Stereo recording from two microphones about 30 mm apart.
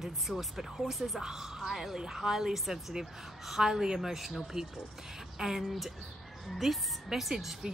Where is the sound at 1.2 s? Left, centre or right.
Centre.